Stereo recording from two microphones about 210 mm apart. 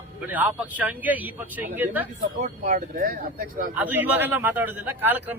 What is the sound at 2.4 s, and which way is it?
Speech, 40° right (ahead or behind).